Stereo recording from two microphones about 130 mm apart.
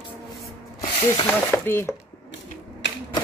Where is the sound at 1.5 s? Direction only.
20° left (ahead or behind).